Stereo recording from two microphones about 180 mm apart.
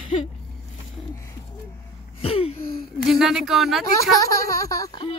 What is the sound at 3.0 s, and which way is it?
Speech, centre (ahead or behind).